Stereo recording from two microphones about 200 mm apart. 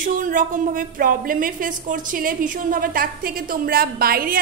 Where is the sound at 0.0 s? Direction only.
40° right (ahead or behind).